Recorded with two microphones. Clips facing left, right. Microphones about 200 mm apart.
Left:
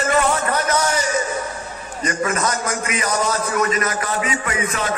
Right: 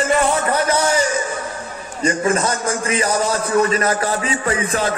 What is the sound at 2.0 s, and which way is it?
A man's voice, 30° right (ahead or behind).